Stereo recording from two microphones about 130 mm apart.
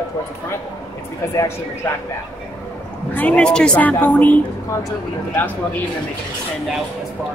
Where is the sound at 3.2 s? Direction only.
10° left (ahead or behind).